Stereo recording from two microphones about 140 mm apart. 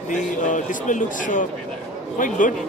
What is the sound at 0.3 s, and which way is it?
A man's voice, 65° left (ahead or behind).